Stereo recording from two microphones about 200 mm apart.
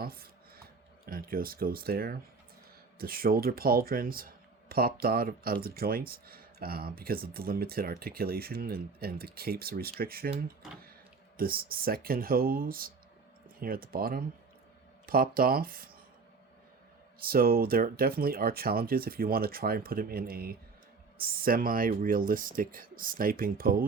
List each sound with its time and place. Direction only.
0.0 s a sound: 50° right (ahead or behind)
1.0 s speech: 45° right (ahead or behind)
11.3 s speech: 45° right (ahead or behind)
17.2 s speech: 50° right (ahead or behind)